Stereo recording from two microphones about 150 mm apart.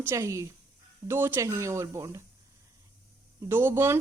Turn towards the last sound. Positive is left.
turn(degrees=-15)  # may be behind; listen again after turning